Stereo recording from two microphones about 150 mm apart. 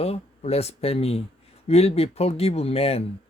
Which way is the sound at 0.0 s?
45° left (ahead or behind).